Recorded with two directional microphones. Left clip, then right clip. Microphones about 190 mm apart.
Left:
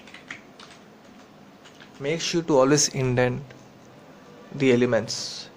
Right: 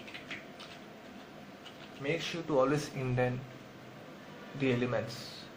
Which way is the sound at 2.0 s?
45° left (ahead or behind).